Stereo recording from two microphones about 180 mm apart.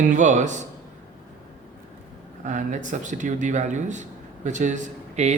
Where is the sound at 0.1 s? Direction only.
40° right (ahead or behind).